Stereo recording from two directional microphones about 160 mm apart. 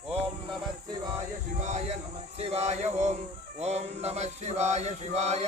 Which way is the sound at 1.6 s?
45° right (ahead or behind).